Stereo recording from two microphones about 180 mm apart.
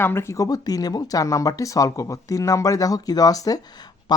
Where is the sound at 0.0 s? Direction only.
15° left (ahead or behind).